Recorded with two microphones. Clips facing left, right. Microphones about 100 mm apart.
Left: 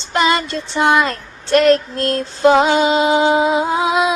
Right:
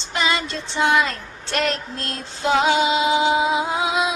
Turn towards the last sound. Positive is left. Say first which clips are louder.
# left 5 dB
turn(degrees=55)  # may be behind; listen again after turning